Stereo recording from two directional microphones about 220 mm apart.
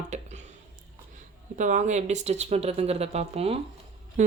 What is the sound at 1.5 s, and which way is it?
Speech, 35° right (ahead or behind).